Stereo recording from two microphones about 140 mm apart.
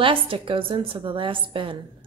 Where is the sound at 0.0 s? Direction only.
40° right (ahead or behind).